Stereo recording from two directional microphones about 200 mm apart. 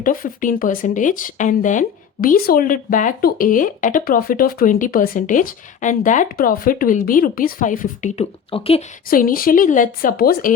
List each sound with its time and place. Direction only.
0.0 s speech: 45° left (ahead or behind); by 8.8 s 30° left (ahead or behind)
9.0 s speech: 45° left (ahead or behind)